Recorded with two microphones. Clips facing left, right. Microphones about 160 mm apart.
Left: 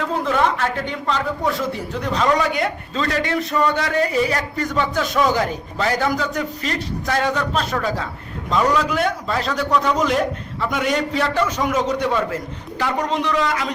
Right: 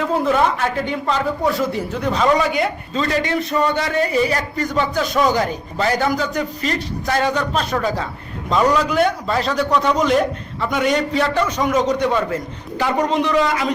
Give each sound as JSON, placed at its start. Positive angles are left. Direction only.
{"t": 0.0, "sound": "a woman's voice", "side_deg": -5}
{"t": 3.5, "sound": "a man's voice", "side_deg": -20}
{"t": 3.8, "sound": "a man's voice", "side_deg": 0}
{"t": 12.8, "sound": "a man's voice", "side_deg": -5}